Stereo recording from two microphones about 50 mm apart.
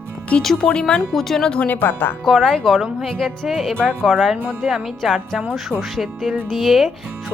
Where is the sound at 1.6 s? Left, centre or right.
Left.